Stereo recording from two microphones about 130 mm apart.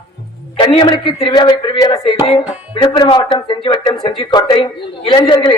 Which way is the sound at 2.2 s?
45° left (ahead or behind).